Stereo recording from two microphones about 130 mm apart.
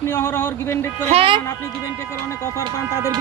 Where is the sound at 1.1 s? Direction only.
45° right (ahead or behind).